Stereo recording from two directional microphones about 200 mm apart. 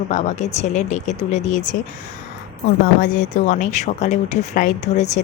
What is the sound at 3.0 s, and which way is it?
Speech, 40° left (ahead or behind).